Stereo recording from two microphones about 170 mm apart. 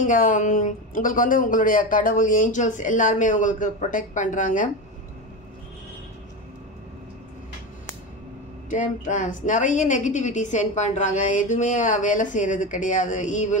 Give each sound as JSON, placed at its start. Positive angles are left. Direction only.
{"t": 0.0, "sound": "a woman's voice", "side_deg": 50}
{"t": 8.6, "sound": "a woman's voice", "side_deg": 50}